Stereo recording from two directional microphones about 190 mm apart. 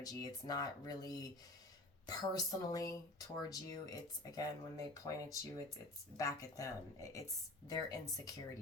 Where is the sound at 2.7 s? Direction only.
20° left (ahead or behind).